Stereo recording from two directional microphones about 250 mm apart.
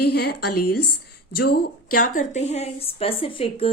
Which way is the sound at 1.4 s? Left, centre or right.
Left.